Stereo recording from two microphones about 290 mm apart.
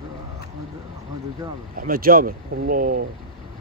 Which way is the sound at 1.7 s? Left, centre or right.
Right.